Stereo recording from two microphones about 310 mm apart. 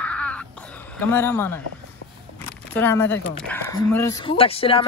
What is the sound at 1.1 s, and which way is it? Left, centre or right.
Speech, centre.